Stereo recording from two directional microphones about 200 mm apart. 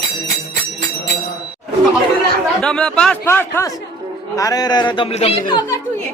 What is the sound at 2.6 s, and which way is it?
A man's voice, 5° left (ahead or behind).